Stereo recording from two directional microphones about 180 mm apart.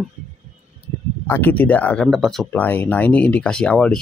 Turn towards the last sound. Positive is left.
turn(degrees=5)  # may be behind; listen again after turning